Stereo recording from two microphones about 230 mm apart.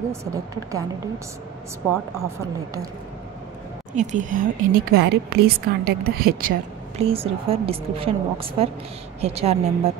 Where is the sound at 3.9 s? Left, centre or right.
Right.